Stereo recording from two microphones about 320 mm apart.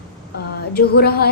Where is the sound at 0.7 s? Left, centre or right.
Left.